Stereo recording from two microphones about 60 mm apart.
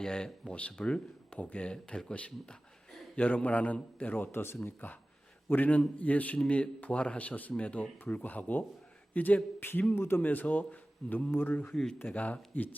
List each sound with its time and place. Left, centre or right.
0.0 s a man's voice: centre; by 10.2 s left
10.2 s a man's voice: left
12.1 s a man's voice: left